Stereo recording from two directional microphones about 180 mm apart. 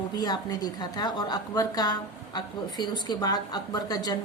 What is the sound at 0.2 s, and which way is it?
A woman's voice, 20° left (ahead or behind).